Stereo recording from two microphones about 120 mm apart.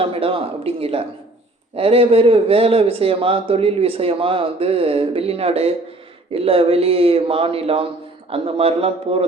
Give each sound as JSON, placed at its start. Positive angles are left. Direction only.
{"t": 0.0, "sound": "speech", "side_deg": -50}